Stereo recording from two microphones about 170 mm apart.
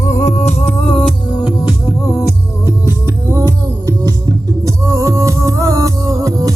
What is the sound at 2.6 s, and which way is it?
Music, 15° right (ahead or behind).